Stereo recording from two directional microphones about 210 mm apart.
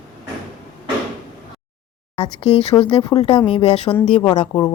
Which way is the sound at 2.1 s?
25° left (ahead or behind).